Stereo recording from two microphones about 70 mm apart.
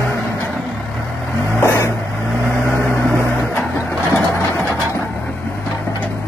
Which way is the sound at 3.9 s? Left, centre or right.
Right.